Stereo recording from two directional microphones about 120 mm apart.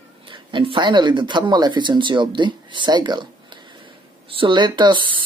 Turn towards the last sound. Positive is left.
turn(degrees=-40)  # may be behind; listen again after turning